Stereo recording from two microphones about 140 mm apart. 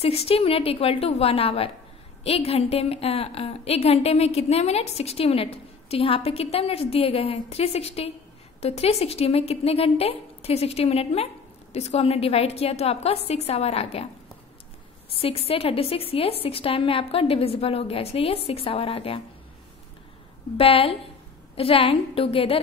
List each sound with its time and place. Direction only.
0.0 s a woman's voice: 45° left (ahead or behind)
15.2 s a woman's voice: 45° left (ahead or behind)
20.5 s a woman's voice: 45° left (ahead or behind)